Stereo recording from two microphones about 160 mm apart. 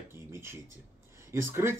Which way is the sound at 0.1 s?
15° right (ahead or behind).